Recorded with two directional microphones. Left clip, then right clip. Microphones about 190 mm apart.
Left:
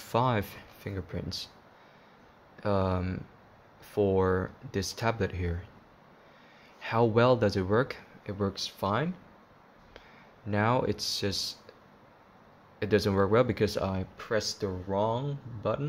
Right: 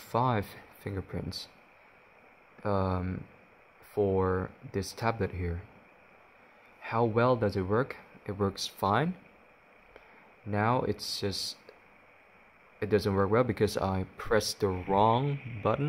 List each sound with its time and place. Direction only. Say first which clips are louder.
0.1 s speech: left 1 dB; 5° right (ahead or behind)
2.6 s speech: left 2 dB; 5° right (ahead or behind)
6.8 s speech: left 2 dB; 5° right (ahead or behind)
8.3 s speech: right 1 dB; 15° right (ahead or behind)
10.5 s speech: left 1 dB; 5° right (ahead or behind)
12.7 s speech: left 1 dB; 5° right (ahead or behind); by 15.9 s 30° right (ahead or behind)